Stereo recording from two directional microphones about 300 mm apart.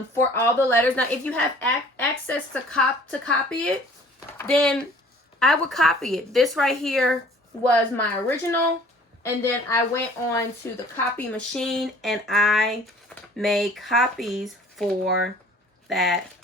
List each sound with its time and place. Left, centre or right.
0.3 s speech: centre